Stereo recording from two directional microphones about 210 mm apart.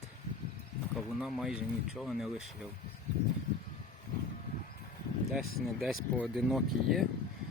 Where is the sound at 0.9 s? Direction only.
Centre (ahead or behind).